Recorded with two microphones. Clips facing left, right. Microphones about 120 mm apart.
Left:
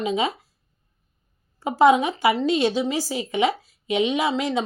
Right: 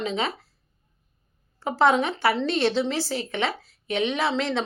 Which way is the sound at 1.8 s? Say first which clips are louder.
Left 4 dB; 15° left (ahead or behind).